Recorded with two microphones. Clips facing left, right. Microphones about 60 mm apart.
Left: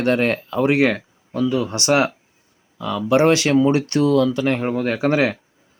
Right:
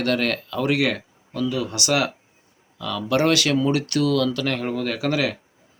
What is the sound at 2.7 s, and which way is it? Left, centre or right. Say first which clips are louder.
Speech: left 5 dB; left.